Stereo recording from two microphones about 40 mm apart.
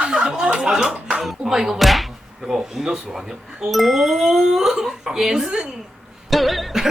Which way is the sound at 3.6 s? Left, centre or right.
Centre.